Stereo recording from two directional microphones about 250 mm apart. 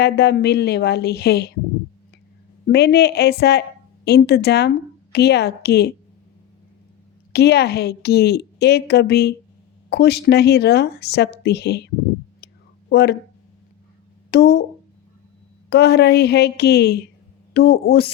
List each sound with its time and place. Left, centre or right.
0.0 s a woman's voice: left
2.6 s a woman's voice: left
7.3 s a woman's voice: left
12.9 s speech: left
14.3 s speech: left
15.7 s a woman's voice: left